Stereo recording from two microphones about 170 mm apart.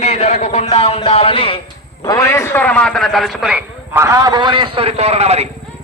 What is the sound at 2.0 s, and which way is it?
A man's voice, 20° left (ahead or behind).